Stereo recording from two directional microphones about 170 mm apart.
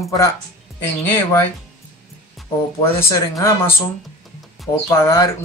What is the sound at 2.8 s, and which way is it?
Speech, 15° left (ahead or behind).